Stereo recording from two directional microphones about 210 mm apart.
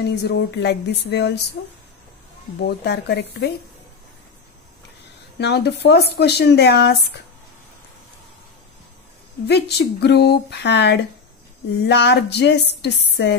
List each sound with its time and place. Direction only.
0.0 s speech: 55° left (ahead or behind)
2.8 s speech: 55° left (ahead or behind)
5.4 s speech: 50° left (ahead or behind)
9.5 s speech: 50° left (ahead or behind)